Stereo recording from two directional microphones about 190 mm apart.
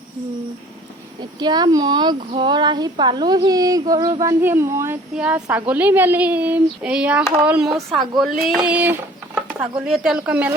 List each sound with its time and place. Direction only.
1.4 s a woman's voice: 20° right (ahead or behind); by 10.5 s 5° right (ahead or behind)